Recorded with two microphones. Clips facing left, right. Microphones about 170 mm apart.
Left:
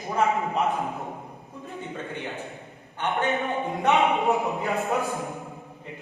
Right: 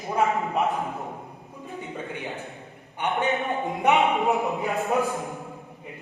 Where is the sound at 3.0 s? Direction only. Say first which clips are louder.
Right 1 dB; 15° right (ahead or behind).